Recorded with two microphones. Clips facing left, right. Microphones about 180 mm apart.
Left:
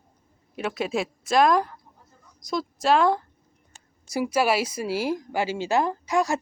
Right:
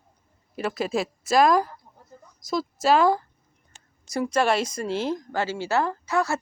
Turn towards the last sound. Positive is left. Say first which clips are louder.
# left 1 dB
turn(degrees=15)  # may be behind; listen again after turning